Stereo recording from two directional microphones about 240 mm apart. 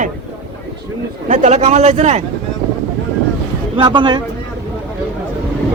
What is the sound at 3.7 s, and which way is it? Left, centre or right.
Speech, centre.